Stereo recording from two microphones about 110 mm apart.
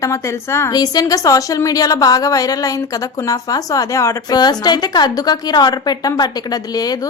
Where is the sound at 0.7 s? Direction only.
35° left (ahead or behind).